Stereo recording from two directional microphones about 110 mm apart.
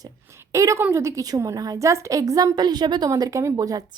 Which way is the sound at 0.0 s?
25° right (ahead or behind).